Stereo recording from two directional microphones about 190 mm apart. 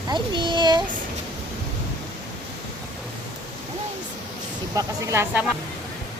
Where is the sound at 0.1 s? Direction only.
25° right (ahead or behind).